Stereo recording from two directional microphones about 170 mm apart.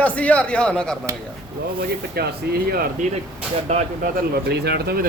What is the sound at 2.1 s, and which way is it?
Speech, 65° right (ahead or behind).